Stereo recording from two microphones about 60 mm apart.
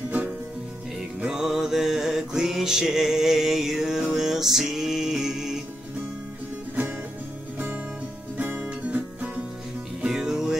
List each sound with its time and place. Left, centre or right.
1.2 s music: centre
7.5 s music: right
10.0 s music: centre